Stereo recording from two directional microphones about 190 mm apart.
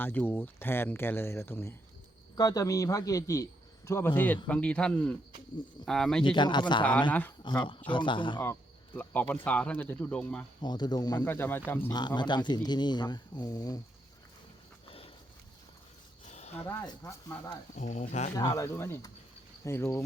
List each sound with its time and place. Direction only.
0.0 s a man's voice: 10° left (ahead or behind)
6.3 s speech: 25° left (ahead or behind)
7.1 s a man's voice: 10° left (ahead or behind)
7.9 s speech: 25° left (ahead or behind)
9.0 s a man's voice: 10° left (ahead or behind)
10.6 s speech: 20° left (ahead or behind)
11.9 s speech: 25° left (ahead or behind)
14.8 s a sound: 30° left (ahead or behind)
16.2 s a sound: 35° left (ahead or behind)
16.6 s a man's voice: 15° left (ahead or behind)
17.7 s speech: 40° left (ahead or behind)
18.3 s a man's voice: 15° left (ahead or behind)